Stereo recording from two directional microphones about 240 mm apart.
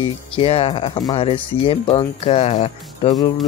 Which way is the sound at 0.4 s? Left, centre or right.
Left.